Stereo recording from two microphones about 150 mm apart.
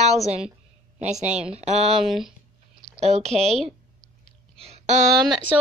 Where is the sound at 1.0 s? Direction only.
50° right (ahead or behind).